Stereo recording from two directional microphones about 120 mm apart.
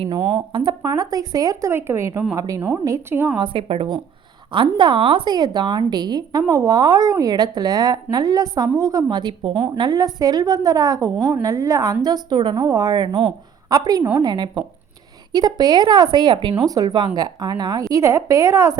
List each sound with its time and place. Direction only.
0.5 s speech: 35° right (ahead or behind)
2.6 s a woman's voice: 15° right (ahead or behind)
3.3 s a woman's voice: 40° right (ahead or behind)
3.6 s speech: 55° right (ahead or behind)
4.5 s a woman's voice: 40° right (ahead or behind)
9.7 s a woman's voice: 35° right (ahead or behind)